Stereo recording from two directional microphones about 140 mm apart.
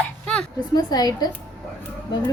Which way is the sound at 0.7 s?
30° left (ahead or behind).